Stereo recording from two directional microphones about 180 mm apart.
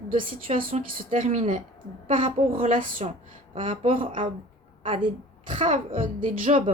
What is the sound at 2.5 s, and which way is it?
Speech, 50° right (ahead or behind).